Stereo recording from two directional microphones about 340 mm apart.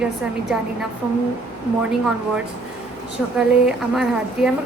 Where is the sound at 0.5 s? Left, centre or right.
Centre.